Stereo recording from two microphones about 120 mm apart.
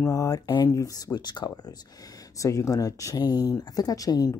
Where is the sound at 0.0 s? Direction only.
25° left (ahead or behind).